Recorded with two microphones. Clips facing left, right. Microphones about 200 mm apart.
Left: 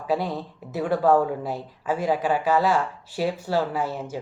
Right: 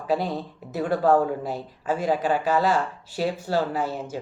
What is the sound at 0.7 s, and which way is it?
Speech, 10° left (ahead or behind).